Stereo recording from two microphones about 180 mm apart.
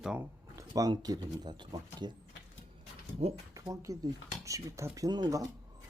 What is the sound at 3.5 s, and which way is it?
Speech, 20° right (ahead or behind).